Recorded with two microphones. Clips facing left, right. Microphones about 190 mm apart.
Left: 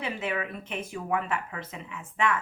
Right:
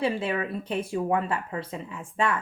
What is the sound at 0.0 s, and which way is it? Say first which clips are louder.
Speech: right 5 dB; 30° right (ahead or behind).